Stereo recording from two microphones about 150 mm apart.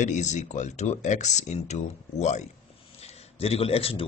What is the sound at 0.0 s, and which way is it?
A man's voice, 50° left (ahead or behind).